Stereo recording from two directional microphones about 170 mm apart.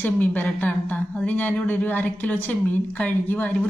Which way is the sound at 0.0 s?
10° left (ahead or behind).